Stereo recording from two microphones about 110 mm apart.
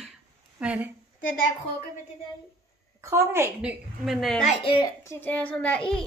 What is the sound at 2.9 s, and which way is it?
Speech, 25° right (ahead or behind).